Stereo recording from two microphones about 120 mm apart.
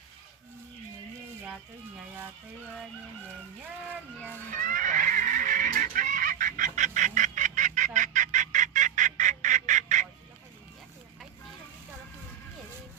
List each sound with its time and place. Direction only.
4.5 s fowl: 90° right